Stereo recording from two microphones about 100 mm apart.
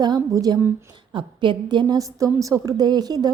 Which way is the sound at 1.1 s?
55° right (ahead or behind).